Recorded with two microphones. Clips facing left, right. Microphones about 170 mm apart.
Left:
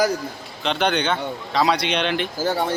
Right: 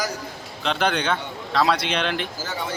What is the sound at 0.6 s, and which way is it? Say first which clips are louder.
A man's voice: left 2 dB; centre (ahead or behind).